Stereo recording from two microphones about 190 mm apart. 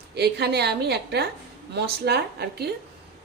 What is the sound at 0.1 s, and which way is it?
Speech, 60° right (ahead or behind).